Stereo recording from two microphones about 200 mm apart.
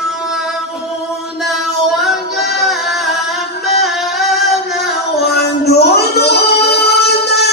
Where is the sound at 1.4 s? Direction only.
Centre (ahead or behind).